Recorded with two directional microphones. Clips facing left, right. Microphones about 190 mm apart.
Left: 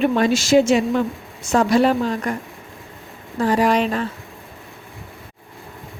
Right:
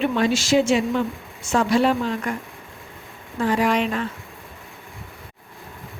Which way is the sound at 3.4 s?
40° left (ahead or behind).